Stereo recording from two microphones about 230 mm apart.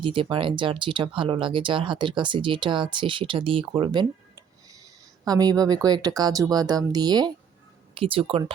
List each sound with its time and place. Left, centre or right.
0.0 s speech: right